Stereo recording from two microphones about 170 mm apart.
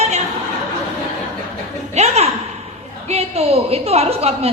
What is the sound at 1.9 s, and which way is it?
A woman's voice, 40° right (ahead or behind).